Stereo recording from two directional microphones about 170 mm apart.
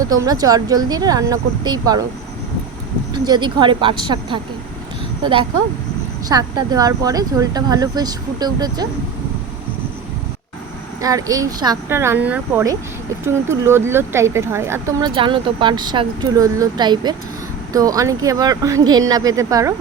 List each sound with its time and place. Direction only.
0.0 s speech: 20° right (ahead or behind)
3.2 s speech: 25° right (ahead or behind)
11.0 s speech: 20° right (ahead or behind)